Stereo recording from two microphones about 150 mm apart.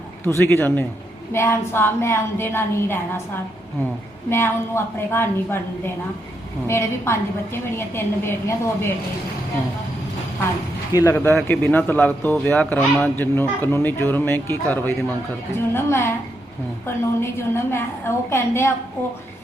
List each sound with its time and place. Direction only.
0.3 s a man's voice: 15° left (ahead or behind)
10.9 s a man's voice: 15° left (ahead or behind)